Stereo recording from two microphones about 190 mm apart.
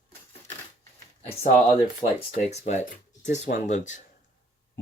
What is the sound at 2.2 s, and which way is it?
Speech, 35° left (ahead or behind).